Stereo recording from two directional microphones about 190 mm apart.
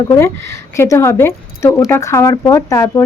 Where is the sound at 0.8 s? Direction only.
15° left (ahead or behind).